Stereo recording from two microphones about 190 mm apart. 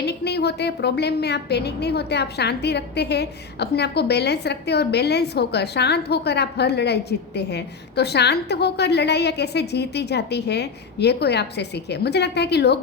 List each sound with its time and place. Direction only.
0.0 s a woman's voice: 60° left (ahead or behind)